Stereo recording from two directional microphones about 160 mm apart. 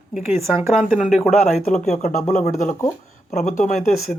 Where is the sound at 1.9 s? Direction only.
45° left (ahead or behind).